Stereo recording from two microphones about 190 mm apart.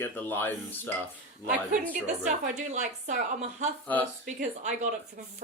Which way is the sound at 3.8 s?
10° left (ahead or behind).